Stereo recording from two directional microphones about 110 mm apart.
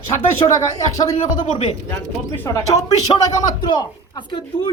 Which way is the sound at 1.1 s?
90° left.